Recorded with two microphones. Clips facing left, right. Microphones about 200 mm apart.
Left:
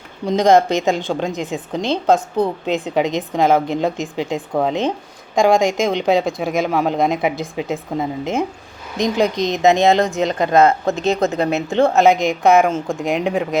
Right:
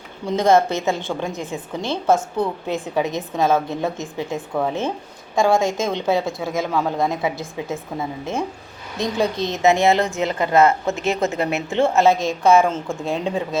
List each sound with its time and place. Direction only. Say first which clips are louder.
0.3 s speech: left 3 dB; 15° left (ahead or behind)